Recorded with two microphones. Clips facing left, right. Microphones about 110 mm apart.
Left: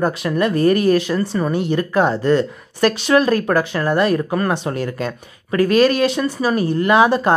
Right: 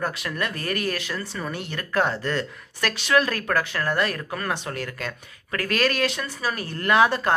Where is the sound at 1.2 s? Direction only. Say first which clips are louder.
Left 12 dB; 50° left (ahead or behind).